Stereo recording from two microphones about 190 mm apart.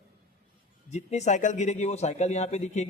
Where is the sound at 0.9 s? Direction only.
35° left (ahead or behind).